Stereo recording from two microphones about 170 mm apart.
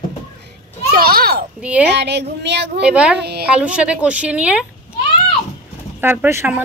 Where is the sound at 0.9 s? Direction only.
60° right (ahead or behind).